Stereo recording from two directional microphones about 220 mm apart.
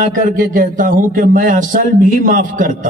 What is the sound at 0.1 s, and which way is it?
A man's voice, 35° right (ahead or behind).